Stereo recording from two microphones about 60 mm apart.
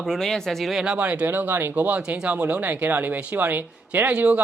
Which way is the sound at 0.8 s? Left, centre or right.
Right.